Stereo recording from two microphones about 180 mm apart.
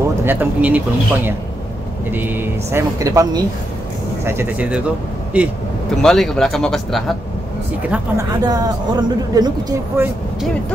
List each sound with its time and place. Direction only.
0.2 s speech: 10° right (ahead or behind)
6.0 s speech: 5° left (ahead or behind)
7.9 s speech: 15° right (ahead or behind)